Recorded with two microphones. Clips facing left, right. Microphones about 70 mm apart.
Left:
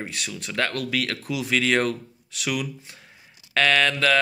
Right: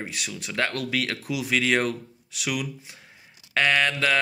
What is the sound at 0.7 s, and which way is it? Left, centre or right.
Speech, right.